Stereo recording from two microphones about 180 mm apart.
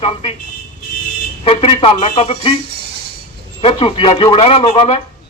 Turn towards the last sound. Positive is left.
turn(degrees=35)  # may be behind; listen again after turning